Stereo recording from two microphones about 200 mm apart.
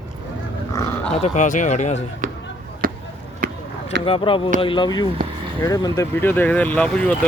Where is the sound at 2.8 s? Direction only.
45° right (ahead or behind).